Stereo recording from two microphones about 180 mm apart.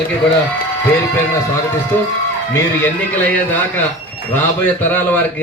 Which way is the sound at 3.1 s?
10° left (ahead or behind).